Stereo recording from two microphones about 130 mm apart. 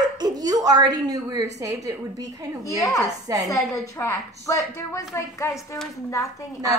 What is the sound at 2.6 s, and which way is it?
A woman's voice, 25° left (ahead or behind).